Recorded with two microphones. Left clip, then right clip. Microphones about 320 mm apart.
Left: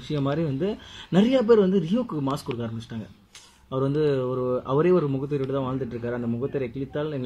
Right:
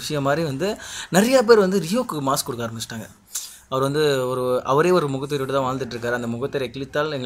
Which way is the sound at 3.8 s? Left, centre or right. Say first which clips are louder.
Right 4 dB; right.